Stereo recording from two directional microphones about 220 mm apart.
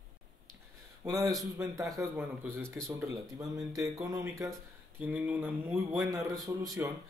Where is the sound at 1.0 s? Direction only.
15° right (ahead or behind).